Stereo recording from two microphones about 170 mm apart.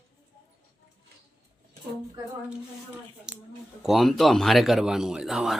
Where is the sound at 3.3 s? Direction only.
5° right (ahead or behind).